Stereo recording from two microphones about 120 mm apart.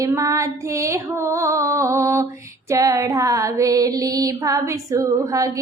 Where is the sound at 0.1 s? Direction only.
25° right (ahead or behind).